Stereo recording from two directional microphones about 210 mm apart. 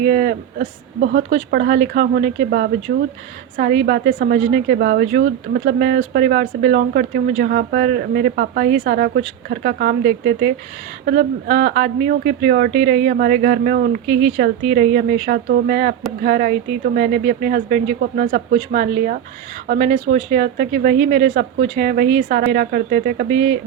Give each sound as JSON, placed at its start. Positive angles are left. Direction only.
{"t": 0.0, "sound": "a woman's voice", "side_deg": -40}